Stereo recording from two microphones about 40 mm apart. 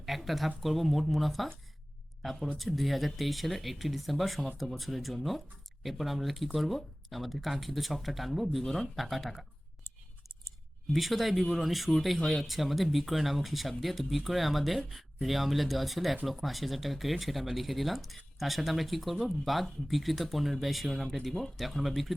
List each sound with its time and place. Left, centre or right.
0.0 s speech: centre
10.9 s speech: centre